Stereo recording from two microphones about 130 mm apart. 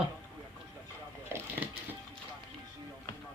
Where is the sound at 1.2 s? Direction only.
20° right (ahead or behind).